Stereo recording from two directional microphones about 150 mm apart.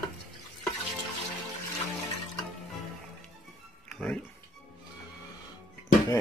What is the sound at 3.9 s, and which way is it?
Speech, 5° left (ahead or behind).